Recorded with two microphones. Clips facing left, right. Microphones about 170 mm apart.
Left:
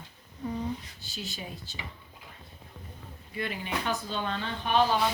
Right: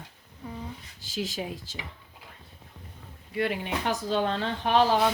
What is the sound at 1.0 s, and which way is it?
Speech, 90° right.